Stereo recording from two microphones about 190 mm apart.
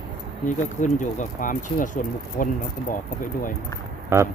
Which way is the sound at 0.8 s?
40° left (ahead or behind).